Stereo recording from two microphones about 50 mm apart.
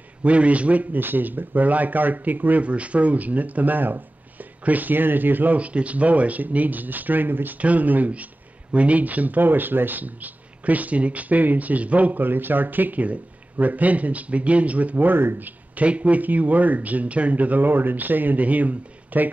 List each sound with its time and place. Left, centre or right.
0.2 s a man's voice: right
0.9 s speech: right
7.5 s speech: right